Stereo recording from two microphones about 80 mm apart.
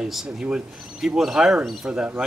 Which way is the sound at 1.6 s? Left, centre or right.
Centre.